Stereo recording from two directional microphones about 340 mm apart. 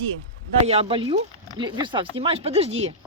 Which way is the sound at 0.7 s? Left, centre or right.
Centre.